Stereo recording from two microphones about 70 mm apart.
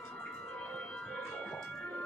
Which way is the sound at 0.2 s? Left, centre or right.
Centre.